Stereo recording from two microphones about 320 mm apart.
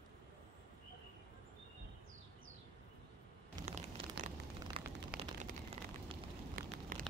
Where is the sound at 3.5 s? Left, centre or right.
Centre.